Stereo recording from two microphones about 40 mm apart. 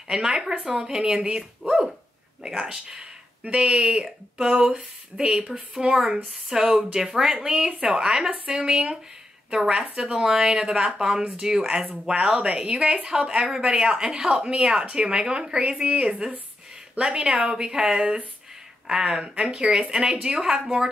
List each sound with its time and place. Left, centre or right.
0.1 s speech: centre
7.8 s speech: right